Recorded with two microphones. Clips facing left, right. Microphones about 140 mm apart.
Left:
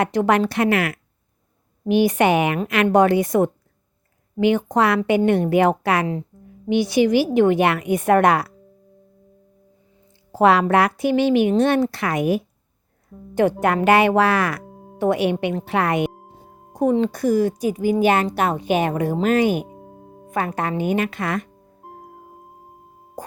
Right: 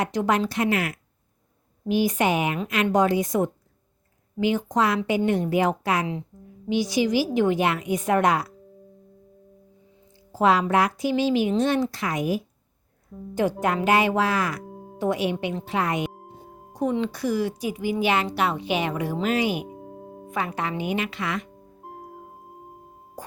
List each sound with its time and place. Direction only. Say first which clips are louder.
0.0 s speech: left 5 dB; 60° left (ahead or behind)
10.3 s speech: left 4 dB; 65° left (ahead or behind)
14.7 s music: right 2 dB; centre (ahead or behind)
14.9 s speech: left 5 dB; 60° left (ahead or behind)
16.7 s a woman's voice: left 6 dB; 45° left (ahead or behind)
19.6 s music: right 3 dB; centre (ahead or behind)
20.3 s a woman's voice: left 5 dB; 50° left (ahead or behind)
21.8 s music: even; centre (ahead or behind)
23.2 s music: left 5 dB; 50° left (ahead or behind)